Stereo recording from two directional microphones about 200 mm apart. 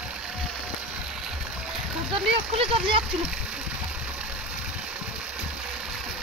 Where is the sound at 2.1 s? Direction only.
25° right (ahead or behind).